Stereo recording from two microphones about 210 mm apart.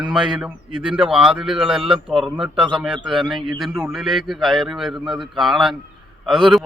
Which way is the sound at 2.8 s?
Centre (ahead or behind).